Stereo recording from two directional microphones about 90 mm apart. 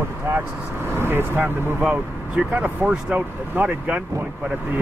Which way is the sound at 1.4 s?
10° right (ahead or behind).